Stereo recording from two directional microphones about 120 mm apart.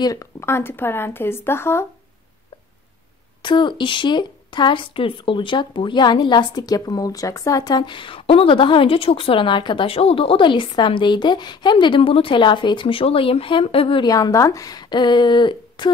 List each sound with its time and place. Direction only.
0.0 s speech: 30° left (ahead or behind)
3.4 s a woman's voice: 40° left (ahead or behind)
14.0 s speech: 30° left (ahead or behind)